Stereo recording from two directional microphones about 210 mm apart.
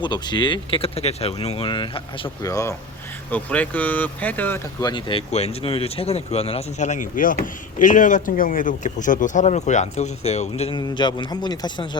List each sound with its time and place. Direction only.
0.0 s speech: 20° left (ahead or behind)